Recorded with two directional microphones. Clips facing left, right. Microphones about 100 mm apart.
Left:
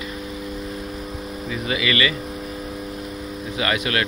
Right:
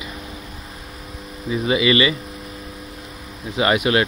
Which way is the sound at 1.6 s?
25° right (ahead or behind).